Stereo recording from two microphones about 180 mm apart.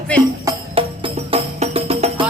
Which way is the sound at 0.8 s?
30° right (ahead or behind).